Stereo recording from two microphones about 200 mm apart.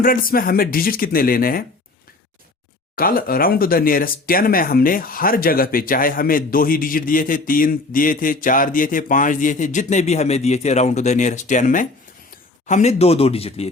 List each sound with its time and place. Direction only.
0.0 s speech: 45° left (ahead or behind)
2.9 s speech: 45° left (ahead or behind); by 13.7 s 30° left (ahead or behind)